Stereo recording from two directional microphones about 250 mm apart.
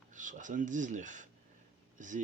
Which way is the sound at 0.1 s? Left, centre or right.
Right.